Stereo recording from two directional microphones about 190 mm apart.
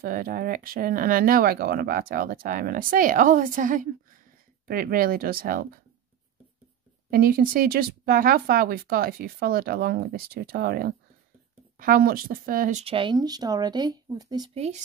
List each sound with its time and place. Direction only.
0.0 s speech: 50° right (ahead or behind)
7.1 s speech: 50° right (ahead or behind)
12.8 s speech: 25° right (ahead or behind)
14.5 s speech: 35° right (ahead or behind)